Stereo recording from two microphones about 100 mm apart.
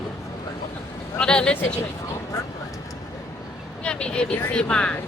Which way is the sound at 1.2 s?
10° left (ahead or behind).